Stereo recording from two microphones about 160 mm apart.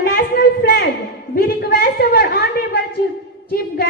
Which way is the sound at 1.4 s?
75° left (ahead or behind).